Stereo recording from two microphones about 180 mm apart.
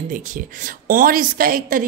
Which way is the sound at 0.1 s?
50° right (ahead or behind).